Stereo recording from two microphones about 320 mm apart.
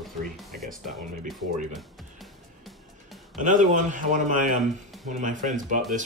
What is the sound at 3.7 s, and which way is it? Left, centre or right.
Speech, right.